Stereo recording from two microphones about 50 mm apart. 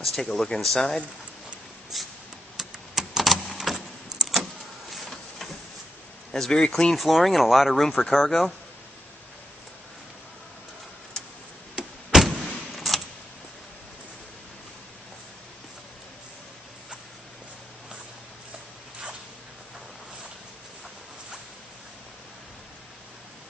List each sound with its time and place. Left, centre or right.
0.0 s speech: centre
1.9 s shuffle: centre
2.5 s a sound: centre
4.1 s vehicle: centre
4.9 s printer: centre
6.3 s speech: centre
7.0 s speech: centre
11.8 s door: centre
12.1 s vehicle: centre